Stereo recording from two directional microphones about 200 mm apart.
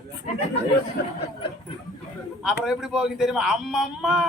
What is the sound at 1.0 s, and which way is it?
Speech, 60° left (ahead or behind).